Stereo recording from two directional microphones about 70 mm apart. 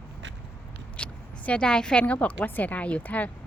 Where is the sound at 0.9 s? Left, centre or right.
Centre.